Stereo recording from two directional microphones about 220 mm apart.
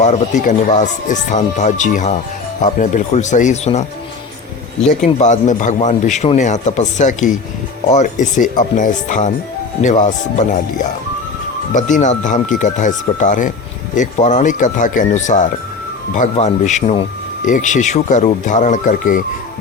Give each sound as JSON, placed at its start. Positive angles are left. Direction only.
{"t": 0.0, "sound": "a man's voice", "side_deg": 35}
{"t": 5.0, "sound": "a man's voice", "side_deg": 35}
{"t": 11.7, "sound": "a man's voice", "side_deg": 35}